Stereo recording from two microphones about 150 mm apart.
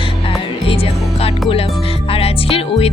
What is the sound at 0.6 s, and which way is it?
Speech, 35° left (ahead or behind).